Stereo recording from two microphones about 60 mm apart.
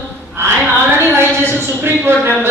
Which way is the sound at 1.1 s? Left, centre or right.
Right.